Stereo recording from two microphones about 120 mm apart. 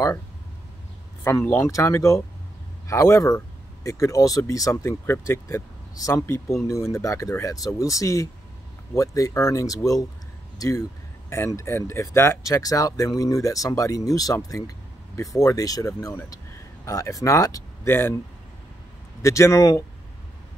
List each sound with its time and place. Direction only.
1.2 s speech: 20° left (ahead or behind)
19.2 s speech: 25° left (ahead or behind)